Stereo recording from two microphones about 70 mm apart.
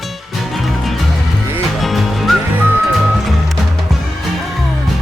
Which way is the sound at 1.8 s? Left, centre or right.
Centre.